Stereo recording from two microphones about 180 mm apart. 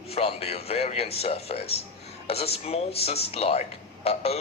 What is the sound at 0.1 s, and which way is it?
A man's voice, 35° left (ahead or behind).